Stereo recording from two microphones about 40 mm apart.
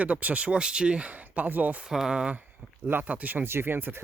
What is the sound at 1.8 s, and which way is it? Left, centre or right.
Speech, centre.